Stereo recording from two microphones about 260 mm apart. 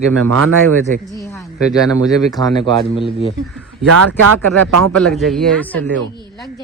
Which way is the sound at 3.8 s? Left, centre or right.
Right.